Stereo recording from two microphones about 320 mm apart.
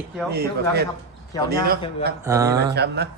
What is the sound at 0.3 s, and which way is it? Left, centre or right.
Speech, right.